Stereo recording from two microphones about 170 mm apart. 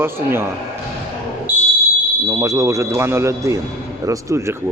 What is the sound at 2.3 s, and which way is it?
Speech, 20° right (ahead or behind).